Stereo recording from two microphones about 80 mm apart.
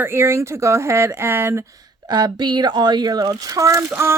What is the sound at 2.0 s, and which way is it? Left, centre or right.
Speech, right.